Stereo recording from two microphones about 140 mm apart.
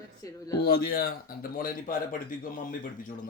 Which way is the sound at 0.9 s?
90° left.